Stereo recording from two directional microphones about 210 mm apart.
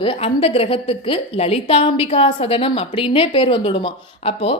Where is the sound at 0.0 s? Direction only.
25° left (ahead or behind).